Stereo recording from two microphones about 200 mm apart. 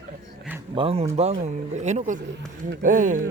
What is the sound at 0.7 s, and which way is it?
Speech, 25° right (ahead or behind).